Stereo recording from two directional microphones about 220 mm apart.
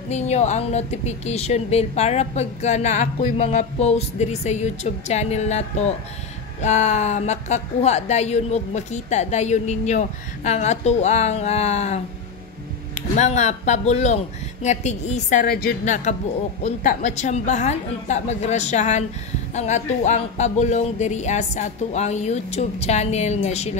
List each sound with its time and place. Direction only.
0.1 s a woman's voice: 30° left (ahead or behind)
13.1 s a woman's voice: 30° left (ahead or behind)